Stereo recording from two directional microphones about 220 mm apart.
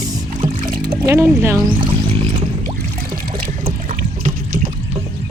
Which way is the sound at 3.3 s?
25° right (ahead or behind).